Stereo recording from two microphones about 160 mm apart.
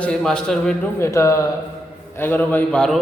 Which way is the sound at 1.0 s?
20° left (ahead or behind).